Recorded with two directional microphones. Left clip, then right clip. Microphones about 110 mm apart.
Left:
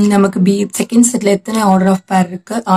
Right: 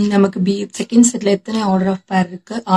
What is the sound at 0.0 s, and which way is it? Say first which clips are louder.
Speech: left 3 dB; 35° left (ahead or behind).